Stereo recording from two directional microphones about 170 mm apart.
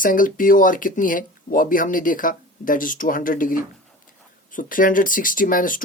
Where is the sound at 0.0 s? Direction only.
50° left (ahead or behind).